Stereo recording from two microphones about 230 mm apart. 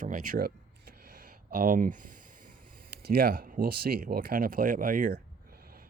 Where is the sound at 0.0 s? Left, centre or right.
Right.